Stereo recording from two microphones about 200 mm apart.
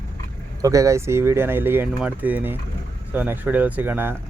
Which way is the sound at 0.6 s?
15° right (ahead or behind).